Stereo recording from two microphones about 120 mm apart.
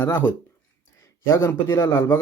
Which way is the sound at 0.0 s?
15° left (ahead or behind).